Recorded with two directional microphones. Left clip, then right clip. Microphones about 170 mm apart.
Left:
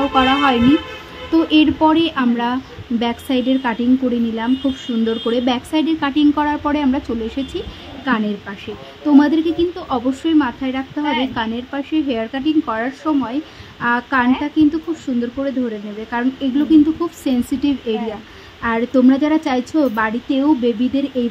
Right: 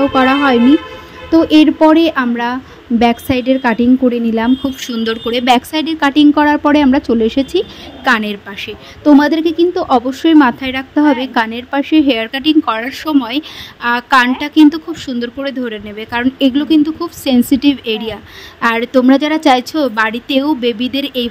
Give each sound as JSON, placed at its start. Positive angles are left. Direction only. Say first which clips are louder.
{"t": 0.1, "sound": "a woman's voice", "louder": "right 3 dB", "side_deg": -25}
{"t": 5.3, "sound": "a woman's voice", "louder": "right 10 dB", "side_deg": -40}